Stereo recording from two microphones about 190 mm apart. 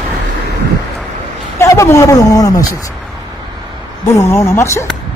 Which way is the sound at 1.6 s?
15° left (ahead or behind).